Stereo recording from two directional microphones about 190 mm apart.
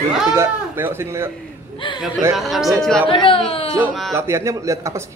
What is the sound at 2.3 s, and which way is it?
Speech, centre (ahead or behind).